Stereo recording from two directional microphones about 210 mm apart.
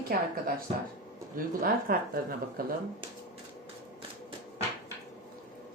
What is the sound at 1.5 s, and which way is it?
Speech, 45° right (ahead or behind).